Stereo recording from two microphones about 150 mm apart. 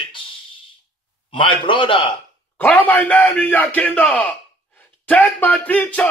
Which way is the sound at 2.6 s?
10° left (ahead or behind).